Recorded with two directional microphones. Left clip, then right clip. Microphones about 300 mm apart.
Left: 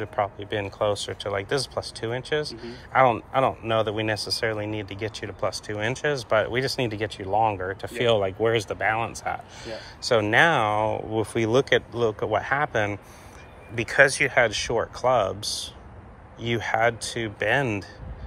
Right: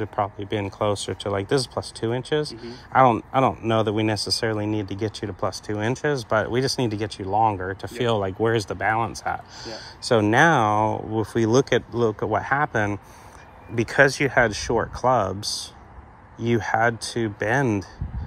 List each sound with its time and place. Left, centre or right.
0.0 s speech: right